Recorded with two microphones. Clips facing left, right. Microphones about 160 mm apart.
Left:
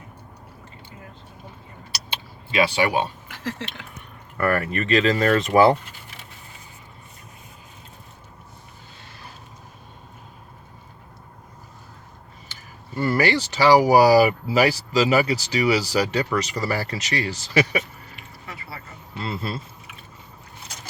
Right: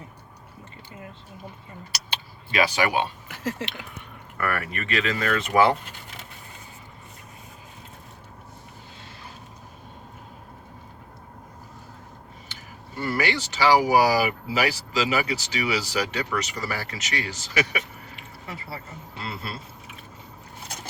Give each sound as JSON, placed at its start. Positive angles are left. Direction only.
{"t": 2.5, "sound": "speech", "side_deg": 25}
{"t": 3.2, "sound": "speech", "side_deg": -5}
{"t": 4.4, "sound": "speech", "side_deg": 30}
{"t": 13.1, "sound": "speech", "side_deg": 35}
{"t": 18.2, "sound": "a sound", "side_deg": -30}